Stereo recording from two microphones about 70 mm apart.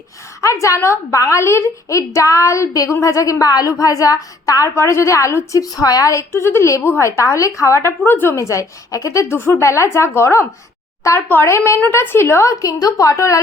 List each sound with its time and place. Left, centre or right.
0.4 s a woman's voice: left
4.7 s a woman's voice: left
8.4 s a woman's voice: left
11.3 s a woman's voice: left